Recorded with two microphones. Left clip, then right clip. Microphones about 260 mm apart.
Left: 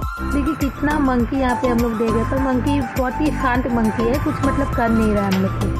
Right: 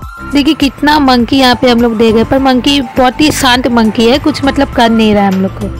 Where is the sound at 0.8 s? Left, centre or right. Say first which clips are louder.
Right 12 dB; right.